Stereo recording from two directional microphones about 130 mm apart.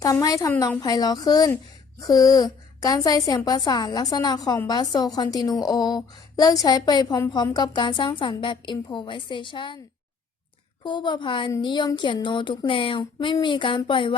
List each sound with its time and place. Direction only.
0.0 s a woman's voice: 25° left (ahead or behind)
10.8 s a woman's voice: 35° left (ahead or behind)